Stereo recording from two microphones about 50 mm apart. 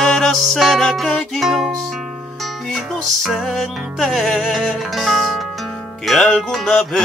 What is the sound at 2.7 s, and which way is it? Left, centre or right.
Music, centre.